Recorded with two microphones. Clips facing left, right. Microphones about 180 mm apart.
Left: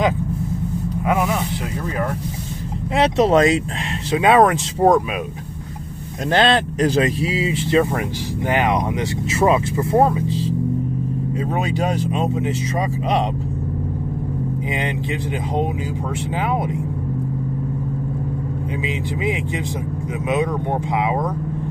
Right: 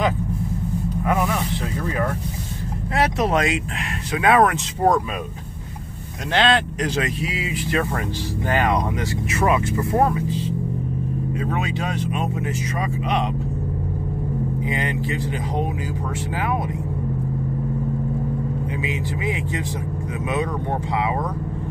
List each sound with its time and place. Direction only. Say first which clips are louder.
1.0 s a sound: left 2 dB; 10° left (ahead or behind)
3.0 s speech: left 6 dB; 25° left (ahead or behind)
4.1 s speech: left 3 dB; 25° left (ahead or behind)
6.3 s speech: left 3 dB; 40° left (ahead or behind)
8.5 s speech: left 2 dB; 20° left (ahead or behind)
14.7 s speech: left 2 dB; 20° left (ahead or behind)
16.3 s speech: left 3 dB; 20° left (ahead or behind)
18.8 s speech: left 2 dB; 20° left (ahead or behind)
21.0 s speech: left 3 dB; 20° left (ahead or behind)